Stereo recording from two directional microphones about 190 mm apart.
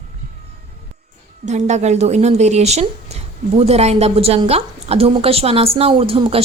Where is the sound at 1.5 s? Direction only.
40° right (ahead or behind).